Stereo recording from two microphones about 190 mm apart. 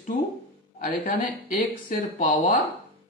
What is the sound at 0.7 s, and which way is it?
A man's voice, 45° left (ahead or behind).